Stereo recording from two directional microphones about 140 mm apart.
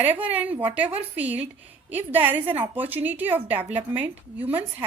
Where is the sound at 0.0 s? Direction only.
10° right (ahead or behind).